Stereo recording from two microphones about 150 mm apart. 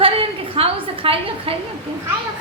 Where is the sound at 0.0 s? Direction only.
40° right (ahead or behind).